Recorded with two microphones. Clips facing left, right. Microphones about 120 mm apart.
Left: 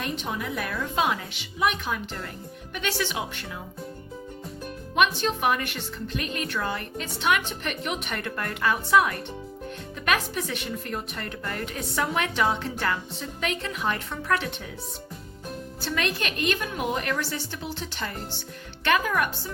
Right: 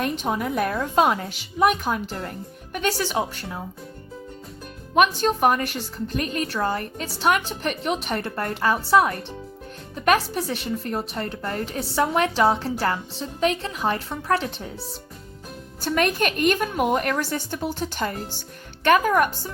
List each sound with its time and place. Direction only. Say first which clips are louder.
0.2 s a woman's voice: right 7 dB; 45° right (ahead or behind)
4.9 s a woman's voice: right 5 dB; 40° right (ahead or behind)
15.8 s a woman's voice: right 7 dB; 45° right (ahead or behind)